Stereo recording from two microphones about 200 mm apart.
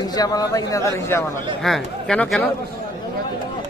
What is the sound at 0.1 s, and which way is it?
Speech, 20° left (ahead or behind).